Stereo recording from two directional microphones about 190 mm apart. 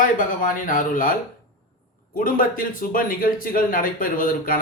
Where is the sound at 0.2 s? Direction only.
45° left (ahead or behind).